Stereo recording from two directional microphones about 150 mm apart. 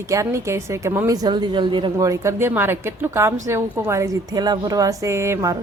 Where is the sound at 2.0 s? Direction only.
20° right (ahead or behind).